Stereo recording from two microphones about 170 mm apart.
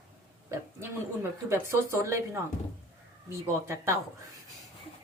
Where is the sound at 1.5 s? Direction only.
15° right (ahead or behind).